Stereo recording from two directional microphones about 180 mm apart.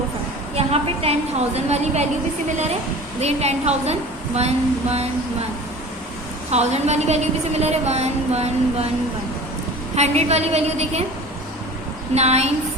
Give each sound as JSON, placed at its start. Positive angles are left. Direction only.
{"t": 0.5, "sound": "a sound", "side_deg": -35}
{"t": 1.5, "sound": "a woman's voice", "side_deg": -40}
{"t": 3.2, "sound": "a woman's voice", "side_deg": -35}
{"t": 6.5, "sound": "a woman's voice", "side_deg": -35}
{"t": 9.9, "sound": "a woman's voice", "side_deg": -35}
{"t": 12.1, "sound": "a woman's voice", "side_deg": -35}